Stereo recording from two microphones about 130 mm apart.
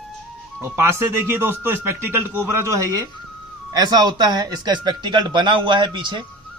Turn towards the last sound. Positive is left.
turn(degrees=-40)  # may be behind; listen again after turning